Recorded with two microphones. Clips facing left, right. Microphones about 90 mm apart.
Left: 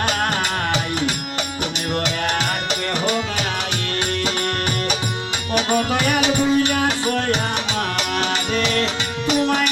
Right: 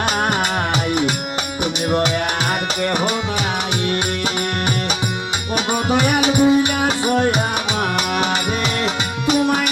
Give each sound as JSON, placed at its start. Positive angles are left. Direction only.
{"t": 5.5, "sound": "music", "side_deg": -20}
{"t": 8.8, "sound": "music", "side_deg": -15}